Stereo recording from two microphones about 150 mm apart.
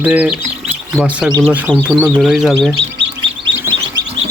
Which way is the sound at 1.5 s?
10° right (ahead or behind).